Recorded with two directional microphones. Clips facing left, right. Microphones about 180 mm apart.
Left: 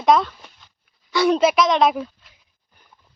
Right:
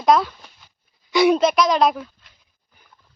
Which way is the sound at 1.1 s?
15° right (ahead or behind).